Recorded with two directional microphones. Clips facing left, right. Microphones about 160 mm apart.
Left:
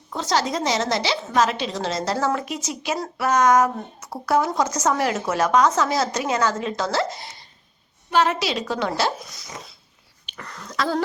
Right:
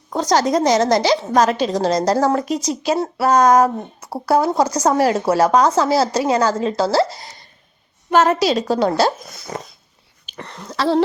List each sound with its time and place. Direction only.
0.1 s a woman's voice: 45° right (ahead or behind)
10.2 s speech: 30° right (ahead or behind)